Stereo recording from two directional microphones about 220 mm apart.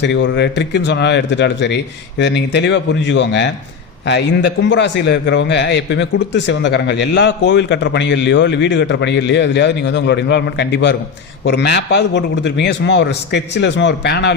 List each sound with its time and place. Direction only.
0.0 s a man's voice: 55° left (ahead or behind)